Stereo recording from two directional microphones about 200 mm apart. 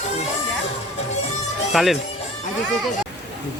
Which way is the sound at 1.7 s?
Centre (ahead or behind).